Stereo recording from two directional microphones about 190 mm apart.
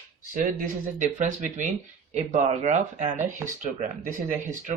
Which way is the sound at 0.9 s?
40° right (ahead or behind).